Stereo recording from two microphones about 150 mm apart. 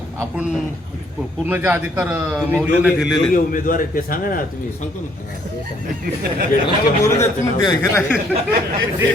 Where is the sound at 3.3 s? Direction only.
65° left (ahead or behind).